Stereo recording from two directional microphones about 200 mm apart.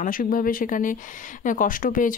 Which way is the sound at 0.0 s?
45° left (ahead or behind).